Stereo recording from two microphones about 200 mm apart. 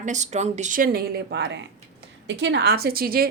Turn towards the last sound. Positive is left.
turn(degrees=-50)  # may be behind; listen again after turning